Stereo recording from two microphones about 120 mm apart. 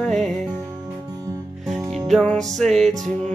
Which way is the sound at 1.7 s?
Centre (ahead or behind).